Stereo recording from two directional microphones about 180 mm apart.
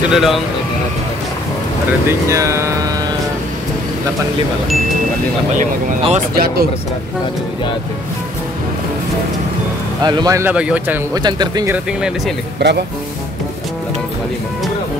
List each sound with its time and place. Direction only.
0.1 s speech: centre (ahead or behind)
2.0 s speech: 15° right (ahead or behind)
6.3 s speech: 60° right (ahead or behind)
10.0 s a man's voice: 20° right (ahead or behind)
10.5 s speech: 5° right (ahead or behind)
11.2 s a man's voice: 25° right (ahead or behind)
12.5 s speech: 70° right (ahead or behind)